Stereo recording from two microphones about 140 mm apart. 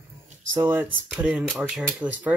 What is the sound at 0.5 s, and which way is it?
Speech, 10° right (ahead or behind).